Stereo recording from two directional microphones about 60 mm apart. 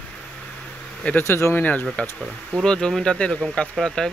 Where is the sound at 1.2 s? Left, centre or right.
Left.